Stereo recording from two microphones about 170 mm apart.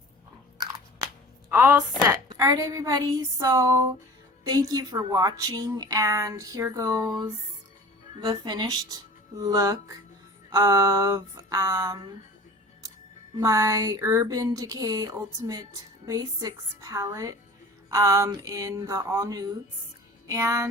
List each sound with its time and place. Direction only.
1.5 s a sound: 15° right (ahead or behind)
2.0 s speech: 20° right (ahead or behind)
13.4 s speech: 20° right (ahead or behind)